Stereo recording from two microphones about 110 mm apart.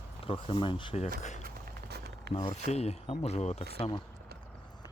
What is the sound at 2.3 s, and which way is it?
Speech, 70° left (ahead or behind).